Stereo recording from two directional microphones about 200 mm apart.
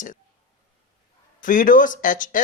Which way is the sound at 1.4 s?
40° left (ahead or behind).